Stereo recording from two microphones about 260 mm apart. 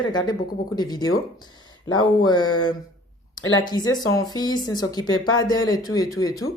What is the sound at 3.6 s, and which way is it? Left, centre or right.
Speech, centre.